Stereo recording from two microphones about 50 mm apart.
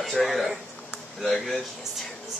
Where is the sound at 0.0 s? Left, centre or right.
Centre.